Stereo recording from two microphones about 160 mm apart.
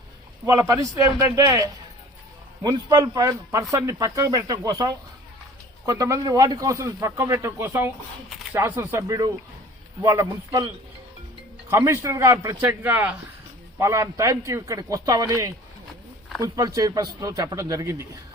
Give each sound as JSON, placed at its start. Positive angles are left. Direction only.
{"t": 0.4, "sound": "a man's voice", "side_deg": -20}
{"t": 11.7, "sound": "a man's voice", "side_deg": -15}